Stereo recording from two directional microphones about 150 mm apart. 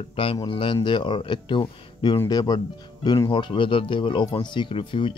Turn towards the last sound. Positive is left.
turn(degrees=35)  # may be behind; listen again after turning